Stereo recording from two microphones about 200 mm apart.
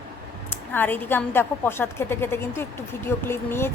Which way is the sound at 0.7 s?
10° left (ahead or behind).